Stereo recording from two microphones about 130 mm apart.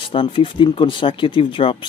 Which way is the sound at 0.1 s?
40° left (ahead or behind).